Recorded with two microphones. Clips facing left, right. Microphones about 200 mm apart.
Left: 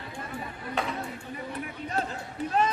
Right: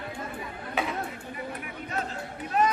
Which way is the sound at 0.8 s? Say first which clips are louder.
Right 1 dB; 5° right (ahead or behind).